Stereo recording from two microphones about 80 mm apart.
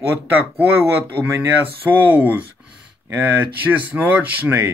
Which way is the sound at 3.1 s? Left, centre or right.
Right.